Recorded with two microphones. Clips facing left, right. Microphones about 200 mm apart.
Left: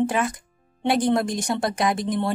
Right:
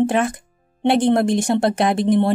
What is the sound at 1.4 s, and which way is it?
Speech, 25° right (ahead or behind).